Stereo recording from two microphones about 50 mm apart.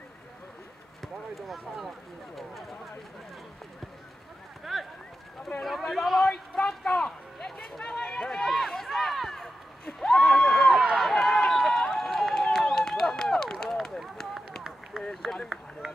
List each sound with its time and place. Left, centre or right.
1.0 s speech: centre
4.7 s clip-clop: centre
5.6 s speech: centre
6.2 s a sound: centre
7.8 s chatter: centre
8.5 s a sound: centre
11.0 s run: centre
14.9 s run: centre